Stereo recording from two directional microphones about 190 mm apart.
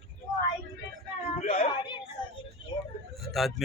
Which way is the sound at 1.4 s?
30° left (ahead or behind).